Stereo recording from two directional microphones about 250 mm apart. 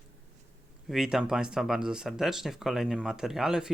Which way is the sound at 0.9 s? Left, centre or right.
Centre.